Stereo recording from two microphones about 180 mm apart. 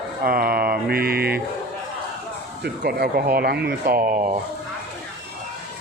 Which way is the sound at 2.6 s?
60° right (ahead or behind).